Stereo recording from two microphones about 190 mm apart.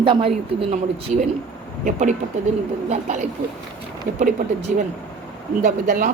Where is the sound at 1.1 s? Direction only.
45° right (ahead or behind).